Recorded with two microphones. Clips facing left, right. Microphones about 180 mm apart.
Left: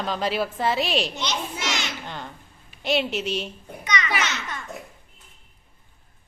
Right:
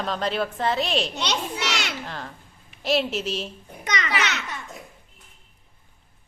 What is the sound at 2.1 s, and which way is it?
A woman's voice, centre (ahead or behind).